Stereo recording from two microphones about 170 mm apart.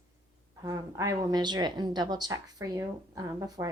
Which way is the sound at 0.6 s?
20° right (ahead or behind).